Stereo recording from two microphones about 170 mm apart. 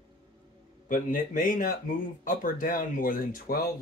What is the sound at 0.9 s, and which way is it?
Speech, 50° left (ahead or behind).